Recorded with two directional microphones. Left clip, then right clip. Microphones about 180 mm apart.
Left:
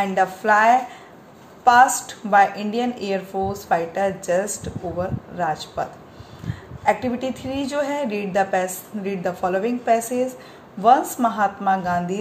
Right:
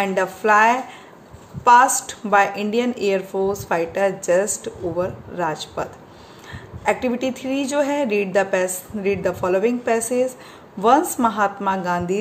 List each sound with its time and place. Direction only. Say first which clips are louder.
0.0 s a woman's voice: even; 30° right (ahead or behind)